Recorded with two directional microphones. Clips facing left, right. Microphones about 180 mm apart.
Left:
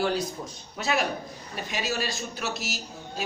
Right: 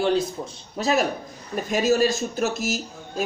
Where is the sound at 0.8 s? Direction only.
40° right (ahead or behind).